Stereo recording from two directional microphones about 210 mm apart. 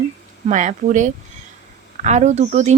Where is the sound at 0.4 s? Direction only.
35° right (ahead or behind).